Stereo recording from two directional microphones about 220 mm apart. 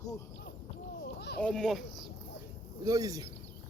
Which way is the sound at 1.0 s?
45° left (ahead or behind).